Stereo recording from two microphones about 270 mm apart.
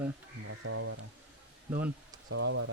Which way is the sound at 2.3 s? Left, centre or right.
Right.